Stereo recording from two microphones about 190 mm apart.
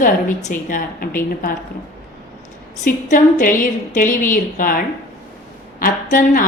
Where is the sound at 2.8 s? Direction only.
40° left (ahead or behind).